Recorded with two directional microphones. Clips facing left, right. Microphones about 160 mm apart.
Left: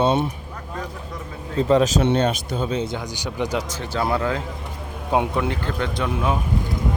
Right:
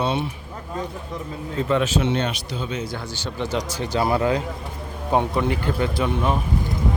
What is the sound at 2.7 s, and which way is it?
Speech, 25° left (ahead or behind).